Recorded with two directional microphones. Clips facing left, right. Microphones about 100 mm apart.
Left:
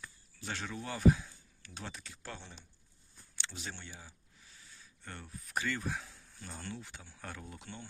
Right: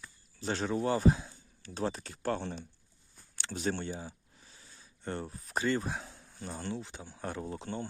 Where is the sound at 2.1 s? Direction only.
50° right (ahead or behind).